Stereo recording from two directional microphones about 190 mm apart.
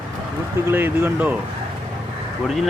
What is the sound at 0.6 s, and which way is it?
Speech, 10° right (ahead or behind).